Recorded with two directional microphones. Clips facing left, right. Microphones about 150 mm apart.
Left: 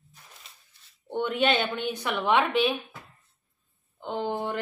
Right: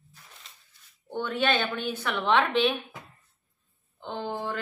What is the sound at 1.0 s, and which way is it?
A woman's voice, 20° left (ahead or behind).